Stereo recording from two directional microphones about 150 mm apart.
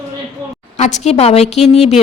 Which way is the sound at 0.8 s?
50° left (ahead or behind).